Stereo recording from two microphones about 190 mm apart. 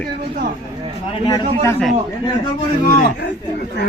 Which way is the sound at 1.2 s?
20° left (ahead or behind).